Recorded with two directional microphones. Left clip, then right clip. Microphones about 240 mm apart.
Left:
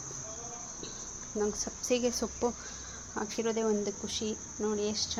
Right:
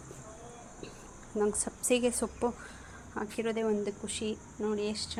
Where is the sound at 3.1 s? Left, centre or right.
Centre.